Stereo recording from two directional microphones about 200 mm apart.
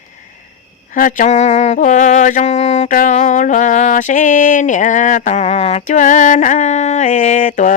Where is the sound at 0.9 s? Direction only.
40° left (ahead or behind).